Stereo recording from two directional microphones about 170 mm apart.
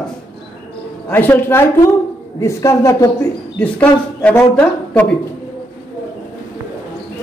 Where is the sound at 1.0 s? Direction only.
10° left (ahead or behind).